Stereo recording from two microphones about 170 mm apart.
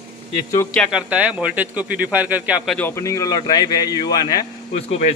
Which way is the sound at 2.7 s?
15° left (ahead or behind).